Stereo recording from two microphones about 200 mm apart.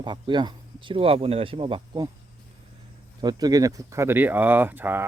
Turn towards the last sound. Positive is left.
turn(degrees=-10)  # may be behind; listen again after turning